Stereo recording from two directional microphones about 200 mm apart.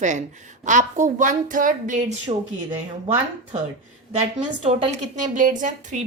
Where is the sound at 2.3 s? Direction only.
25° right (ahead or behind).